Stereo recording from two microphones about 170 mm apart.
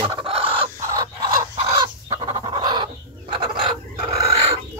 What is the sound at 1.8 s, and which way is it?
Chicken, 25° right (ahead or behind).